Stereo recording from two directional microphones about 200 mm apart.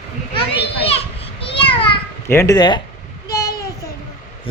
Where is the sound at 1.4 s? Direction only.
25° left (ahead or behind).